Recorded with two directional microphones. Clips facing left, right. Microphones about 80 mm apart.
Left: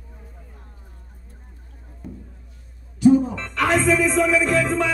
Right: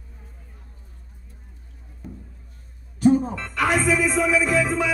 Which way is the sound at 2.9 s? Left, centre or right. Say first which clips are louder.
Left 3 dB; right.